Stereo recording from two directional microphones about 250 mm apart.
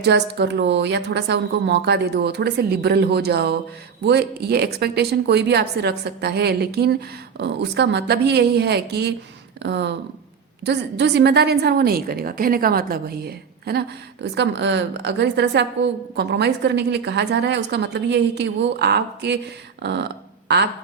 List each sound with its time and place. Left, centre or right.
0.0 s a woman's voice: right